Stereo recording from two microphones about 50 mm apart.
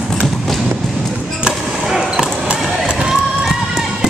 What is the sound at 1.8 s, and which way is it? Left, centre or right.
Basketball bounce, centre.